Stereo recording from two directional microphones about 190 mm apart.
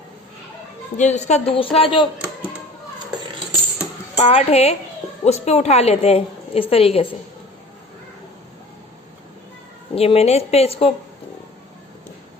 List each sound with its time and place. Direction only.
0.9 s a woman's voice: 35° left (ahead or behind)
4.1 s a woman's voice: 35° left (ahead or behind)
9.9 s a woman's voice: 30° left (ahead or behind)